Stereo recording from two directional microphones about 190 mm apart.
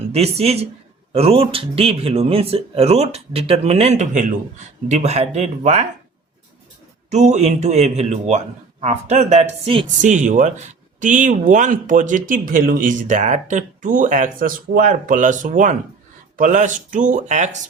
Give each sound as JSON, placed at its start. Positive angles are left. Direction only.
{"t": 0.1, "sound": "speech", "side_deg": -35}
{"t": 7.1, "sound": "speech", "side_deg": -35}